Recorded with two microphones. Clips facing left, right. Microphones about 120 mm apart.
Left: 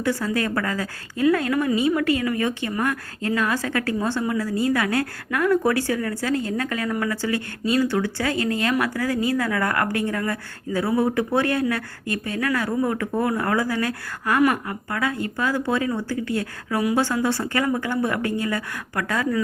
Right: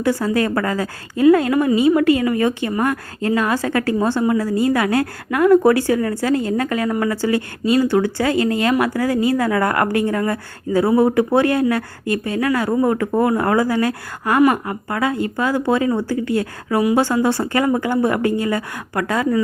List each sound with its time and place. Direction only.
0.0 s a woman's voice: 30° right (ahead or behind)
18.1 s a woman's voice: 25° right (ahead or behind)